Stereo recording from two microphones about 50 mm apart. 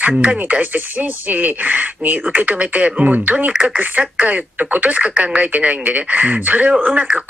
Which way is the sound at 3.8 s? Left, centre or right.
Right.